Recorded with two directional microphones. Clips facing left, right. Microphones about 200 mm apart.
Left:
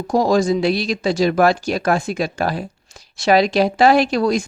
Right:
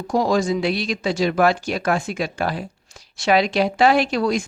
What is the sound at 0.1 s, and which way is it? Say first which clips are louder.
Speech: left 3 dB; 40° left (ahead or behind).